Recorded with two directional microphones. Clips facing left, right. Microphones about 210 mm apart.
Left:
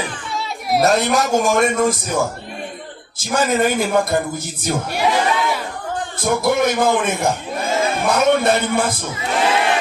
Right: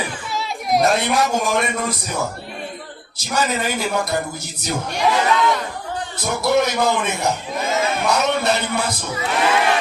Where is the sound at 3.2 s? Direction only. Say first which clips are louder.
Left 5 dB; 50° left (ahead or behind).